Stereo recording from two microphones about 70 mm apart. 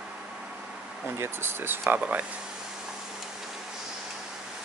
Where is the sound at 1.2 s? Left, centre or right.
Right.